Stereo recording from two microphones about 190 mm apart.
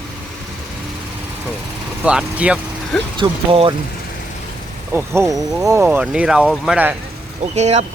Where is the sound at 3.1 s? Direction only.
25° right (ahead or behind).